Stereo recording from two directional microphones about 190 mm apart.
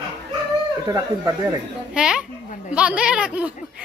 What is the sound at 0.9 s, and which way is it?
Speech, 20° right (ahead or behind).